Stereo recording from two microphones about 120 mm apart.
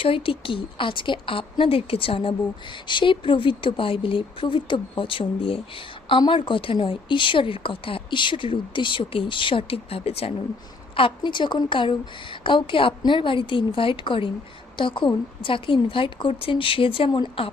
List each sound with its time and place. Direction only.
0.0 s speech: 45° left (ahead or behind)
10.9 s speech: 45° left (ahead or behind)